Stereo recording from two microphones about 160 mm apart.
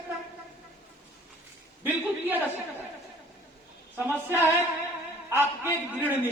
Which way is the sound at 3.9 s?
15° right (ahead or behind).